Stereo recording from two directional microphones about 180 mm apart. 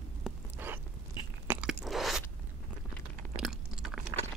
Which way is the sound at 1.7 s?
Centre (ahead or behind).